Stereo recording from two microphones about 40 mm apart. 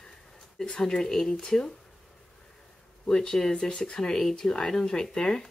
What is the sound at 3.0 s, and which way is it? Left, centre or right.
Speech, centre.